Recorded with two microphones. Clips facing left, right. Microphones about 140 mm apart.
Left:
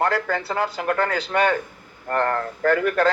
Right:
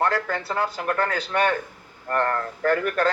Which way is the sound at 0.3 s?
30° left (ahead or behind).